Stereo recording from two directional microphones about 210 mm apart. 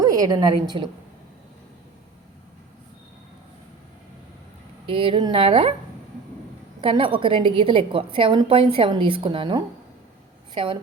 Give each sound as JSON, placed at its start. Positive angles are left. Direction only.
{"t": 0.0, "sound": "a woman's voice", "side_deg": -15}
{"t": 4.9, "sound": "a woman's voice", "side_deg": -25}
{"t": 6.8, "sound": "a woman's voice", "side_deg": -25}